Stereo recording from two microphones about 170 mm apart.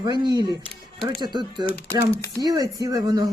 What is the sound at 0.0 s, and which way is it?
Speech, 25° right (ahead or behind).